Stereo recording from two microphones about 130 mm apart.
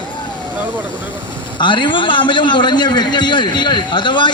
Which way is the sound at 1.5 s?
35° left (ahead or behind).